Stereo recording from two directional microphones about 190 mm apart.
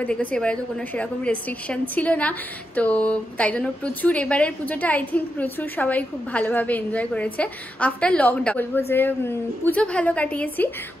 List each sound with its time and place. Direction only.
0.0 s a woman's voice: 10° left (ahead or behind)